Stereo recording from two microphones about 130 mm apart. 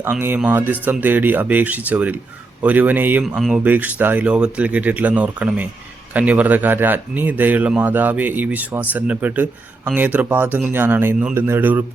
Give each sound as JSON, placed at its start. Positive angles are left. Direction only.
{"t": 0.0, "sound": "speech", "side_deg": -15}